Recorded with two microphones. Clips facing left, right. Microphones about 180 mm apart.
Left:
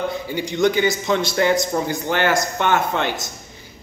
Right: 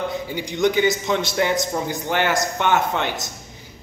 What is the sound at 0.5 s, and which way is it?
A man's voice, 15° right (ahead or behind).